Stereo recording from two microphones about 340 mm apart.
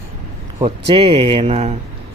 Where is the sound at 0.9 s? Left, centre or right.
Centre.